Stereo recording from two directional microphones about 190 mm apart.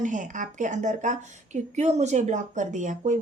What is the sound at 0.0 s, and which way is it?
Speech, 40° right (ahead or behind).